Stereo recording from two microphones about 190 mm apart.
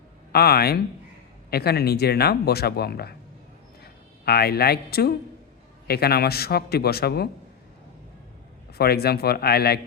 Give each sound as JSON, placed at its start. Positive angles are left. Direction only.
{"t": 0.3, "sound": "a man's voice", "side_deg": 55}
{"t": 4.3, "sound": "a man's voice", "side_deg": 55}
{"t": 8.8, "sound": "a man's voice", "side_deg": 55}